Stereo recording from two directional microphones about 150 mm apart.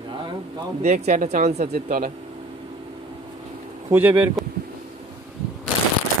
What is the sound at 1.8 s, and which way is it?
Speech, 65° right (ahead or behind).